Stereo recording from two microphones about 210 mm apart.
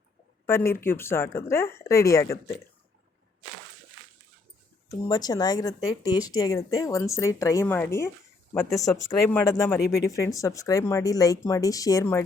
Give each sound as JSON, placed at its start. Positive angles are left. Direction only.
{"t": 0.4, "sound": "speech", "side_deg": 10}
{"t": 4.9, "sound": "speech", "side_deg": 20}